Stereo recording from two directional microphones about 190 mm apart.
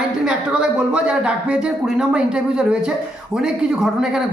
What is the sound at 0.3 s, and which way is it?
A man's voice, 5° right (ahead or behind).